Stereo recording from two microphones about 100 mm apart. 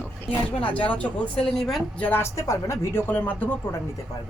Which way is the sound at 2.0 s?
20° left (ahead or behind).